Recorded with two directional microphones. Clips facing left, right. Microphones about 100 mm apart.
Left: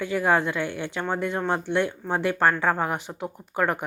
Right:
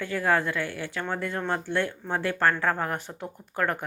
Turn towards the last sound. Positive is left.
turn(degrees=15)  # may be behind; listen again after turning